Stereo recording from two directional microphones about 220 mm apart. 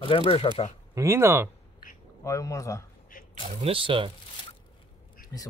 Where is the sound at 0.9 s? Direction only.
10° right (ahead or behind).